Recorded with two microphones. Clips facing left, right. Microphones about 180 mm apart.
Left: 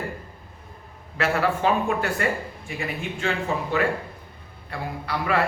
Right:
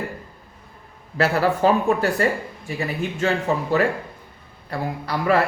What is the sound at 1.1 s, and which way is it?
A man's voice, 35° right (ahead or behind).